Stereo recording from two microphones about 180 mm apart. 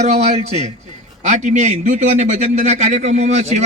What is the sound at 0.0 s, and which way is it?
A man's voice, 40° right (ahead or behind).